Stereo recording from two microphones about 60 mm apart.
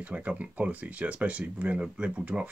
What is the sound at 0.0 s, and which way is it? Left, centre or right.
Speech, right.